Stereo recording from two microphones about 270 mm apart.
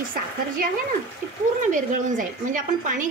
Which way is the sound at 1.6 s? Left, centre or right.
Right.